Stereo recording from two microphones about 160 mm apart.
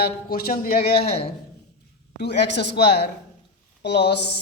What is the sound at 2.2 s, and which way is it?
A man's voice, 90° left.